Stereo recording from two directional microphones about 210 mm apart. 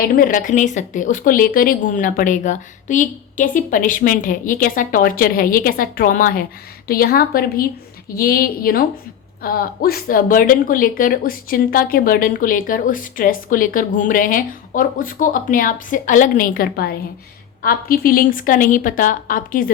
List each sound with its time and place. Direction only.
0.2 s a woman's voice: 40° left (ahead or behind)